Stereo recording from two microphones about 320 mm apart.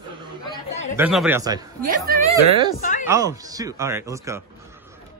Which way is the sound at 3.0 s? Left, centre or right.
Centre.